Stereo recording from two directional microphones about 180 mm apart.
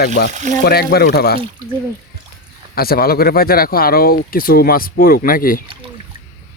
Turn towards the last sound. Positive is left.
turn(degrees=50)  # may be behind; listen again after turning